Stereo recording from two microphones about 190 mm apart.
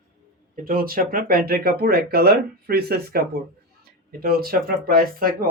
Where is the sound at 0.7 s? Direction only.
50° right (ahead or behind).